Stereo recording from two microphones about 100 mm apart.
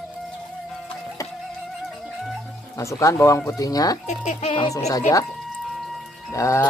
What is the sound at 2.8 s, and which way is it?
Speech, 30° left (ahead or behind).